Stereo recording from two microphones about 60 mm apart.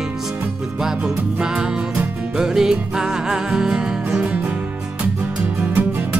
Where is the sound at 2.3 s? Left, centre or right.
Centre.